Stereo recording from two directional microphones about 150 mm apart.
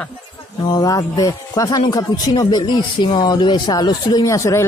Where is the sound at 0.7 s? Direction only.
25° left (ahead or behind).